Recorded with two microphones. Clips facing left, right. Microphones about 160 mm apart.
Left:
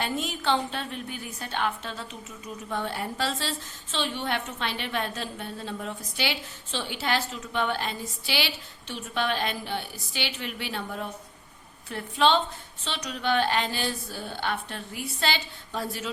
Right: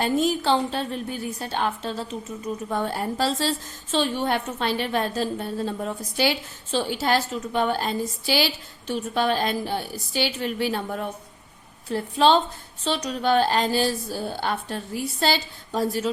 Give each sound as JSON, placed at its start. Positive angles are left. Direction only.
{"t": 0.0, "sound": "a woman's voice", "side_deg": -40}